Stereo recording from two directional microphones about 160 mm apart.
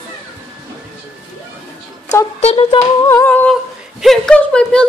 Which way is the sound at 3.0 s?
20° left (ahead or behind).